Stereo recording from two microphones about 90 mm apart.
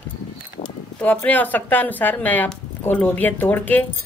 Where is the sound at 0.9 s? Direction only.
20° left (ahead or behind).